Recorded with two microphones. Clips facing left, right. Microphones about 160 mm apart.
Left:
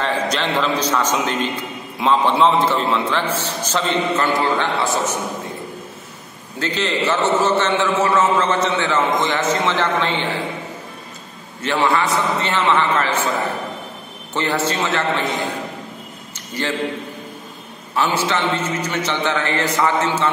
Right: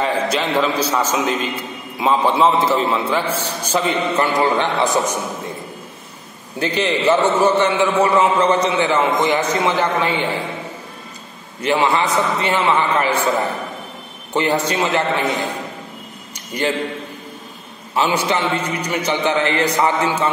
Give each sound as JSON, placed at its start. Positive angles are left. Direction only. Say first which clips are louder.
{"t": 0.0, "sound": "a man's voice", "louder": "right 2 dB", "side_deg": -10}
{"t": 6.6, "sound": "a man's voice", "louder": "right 3 dB", "side_deg": -15}
{"t": 11.6, "sound": "a man's voice", "louder": "right 1 dB", "side_deg": -15}
{"t": 14.3, "sound": "a man's voice", "louder": "right 2 dB", "side_deg": -15}
{"t": 16.3, "sound": "a man's voice", "louder": "right 4 dB", "side_deg": -15}
{"t": 17.9, "sound": "a man's voice", "louder": "right 1 dB", "side_deg": -15}